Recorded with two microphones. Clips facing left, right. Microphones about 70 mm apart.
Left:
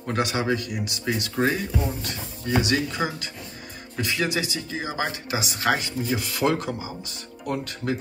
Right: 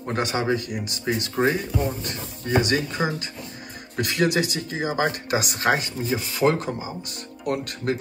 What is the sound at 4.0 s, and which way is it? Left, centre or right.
Speech, right.